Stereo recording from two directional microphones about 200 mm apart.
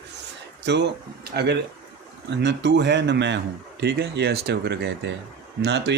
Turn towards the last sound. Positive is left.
turn(degrees=-60)  # may be behind; listen again after turning